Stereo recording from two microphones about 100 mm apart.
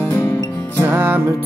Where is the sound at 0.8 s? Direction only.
20° right (ahead or behind).